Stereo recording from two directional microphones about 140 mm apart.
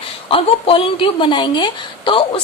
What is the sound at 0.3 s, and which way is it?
A woman's voice, 40° left (ahead or behind).